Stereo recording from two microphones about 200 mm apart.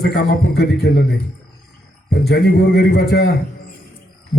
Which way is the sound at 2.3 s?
55° left (ahead or behind).